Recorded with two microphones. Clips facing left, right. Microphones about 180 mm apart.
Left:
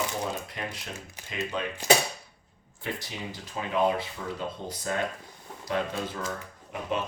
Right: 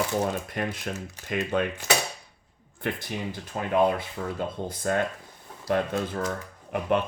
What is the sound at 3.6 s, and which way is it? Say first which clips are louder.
Speech: right 3 dB; 50° right (ahead or behind).